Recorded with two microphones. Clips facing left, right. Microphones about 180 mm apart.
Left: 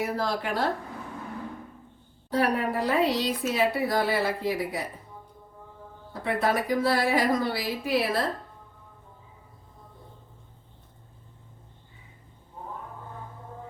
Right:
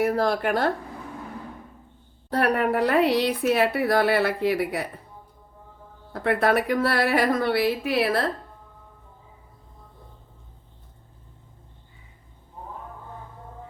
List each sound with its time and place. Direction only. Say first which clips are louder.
0.0 s speech: right 6 dB; 55° right (ahead or behind)
2.3 s speech: right 3 dB; 60° right (ahead or behind)
6.1 s speech: right 5 dB; 65° right (ahead or behind)